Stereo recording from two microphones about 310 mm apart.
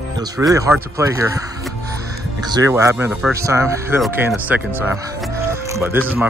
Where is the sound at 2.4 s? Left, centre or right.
Centre.